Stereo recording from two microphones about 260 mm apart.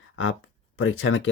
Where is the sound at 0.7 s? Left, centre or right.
Left.